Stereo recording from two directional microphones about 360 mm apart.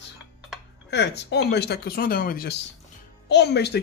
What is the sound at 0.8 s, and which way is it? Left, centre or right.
Speech, left.